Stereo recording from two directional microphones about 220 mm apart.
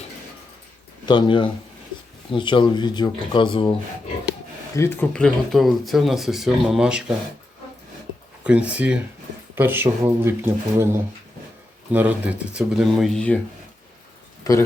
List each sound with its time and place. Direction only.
1.0 s speech: 20° left (ahead or behind)
4.7 s speech: 10° left (ahead or behind)
8.4 s speech: 5° right (ahead or behind)
14.5 s speech: 15° left (ahead or behind)